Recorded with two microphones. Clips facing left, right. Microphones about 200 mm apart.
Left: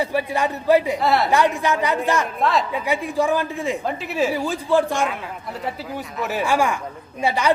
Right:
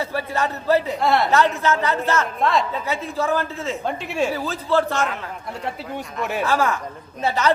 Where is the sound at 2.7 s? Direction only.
15° left (ahead or behind).